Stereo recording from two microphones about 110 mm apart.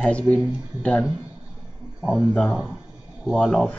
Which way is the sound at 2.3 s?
15° left (ahead or behind).